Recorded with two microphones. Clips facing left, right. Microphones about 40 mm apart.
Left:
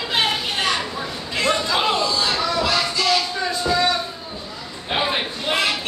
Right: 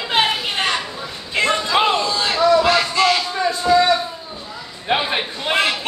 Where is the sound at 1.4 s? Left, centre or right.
Right.